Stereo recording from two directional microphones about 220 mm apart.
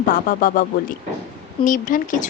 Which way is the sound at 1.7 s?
35° left (ahead or behind).